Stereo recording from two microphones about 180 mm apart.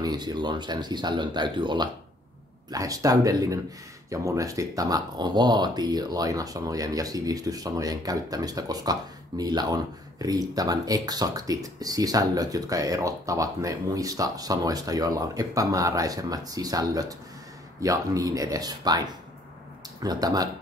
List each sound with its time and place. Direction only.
0.0 s speech: 20° right (ahead or behind)